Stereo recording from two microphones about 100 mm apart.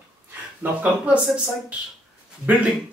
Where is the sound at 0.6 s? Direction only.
10° right (ahead or behind).